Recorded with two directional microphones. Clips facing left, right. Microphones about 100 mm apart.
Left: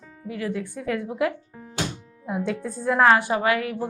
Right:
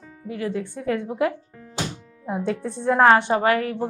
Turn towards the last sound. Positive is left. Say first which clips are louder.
# right 3 dB
turn(degrees=-40)  # may be behind; listen again after turning